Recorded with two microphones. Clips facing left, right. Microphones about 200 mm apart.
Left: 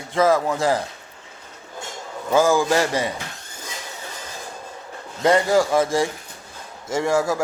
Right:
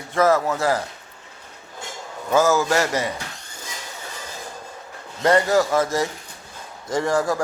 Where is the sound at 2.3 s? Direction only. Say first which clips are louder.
Left 1 dB; 15° left (ahead or behind).